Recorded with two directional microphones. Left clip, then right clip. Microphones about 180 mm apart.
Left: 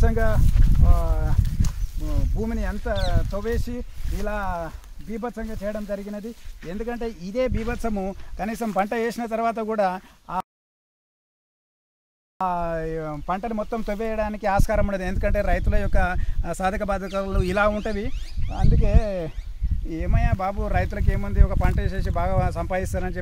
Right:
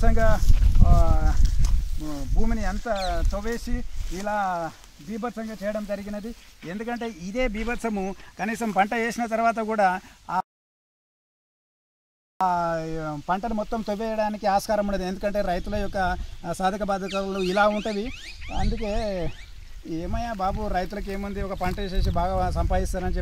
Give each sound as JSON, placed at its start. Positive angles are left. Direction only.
{"t": 0.0, "sound": "speech", "side_deg": 30}
{"t": 5.1, "sound": "speech", "side_deg": 15}
{"t": 6.7, "sound": "speech", "side_deg": 45}
{"t": 12.4, "sound": "speech", "side_deg": 35}